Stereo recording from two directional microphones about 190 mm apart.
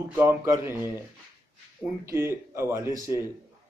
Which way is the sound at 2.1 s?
15° right (ahead or behind).